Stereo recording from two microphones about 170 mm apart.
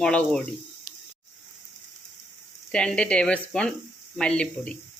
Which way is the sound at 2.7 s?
5° left (ahead or behind).